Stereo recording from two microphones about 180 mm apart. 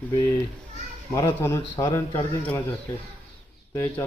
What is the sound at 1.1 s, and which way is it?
Speech, 15° left (ahead or behind).